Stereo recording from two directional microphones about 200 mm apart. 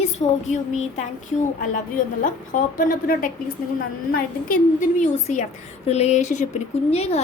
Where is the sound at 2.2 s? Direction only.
40° left (ahead or behind).